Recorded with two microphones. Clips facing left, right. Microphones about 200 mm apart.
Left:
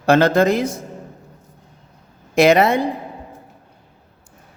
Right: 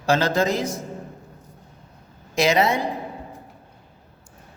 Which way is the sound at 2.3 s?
55° left (ahead or behind).